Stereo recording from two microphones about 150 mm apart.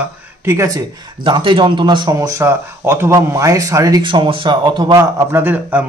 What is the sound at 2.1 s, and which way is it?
Speech, 20° right (ahead or behind).